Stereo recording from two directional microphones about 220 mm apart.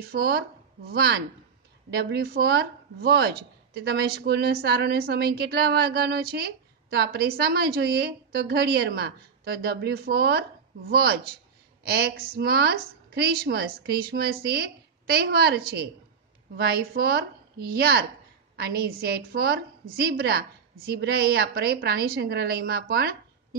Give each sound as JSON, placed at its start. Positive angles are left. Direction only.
{"t": 0.0, "sound": "speech", "side_deg": -45}